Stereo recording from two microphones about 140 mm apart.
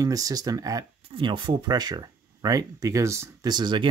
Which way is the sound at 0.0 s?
25° right (ahead or behind).